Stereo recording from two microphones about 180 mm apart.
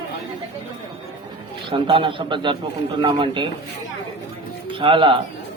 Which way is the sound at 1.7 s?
30° right (ahead or behind).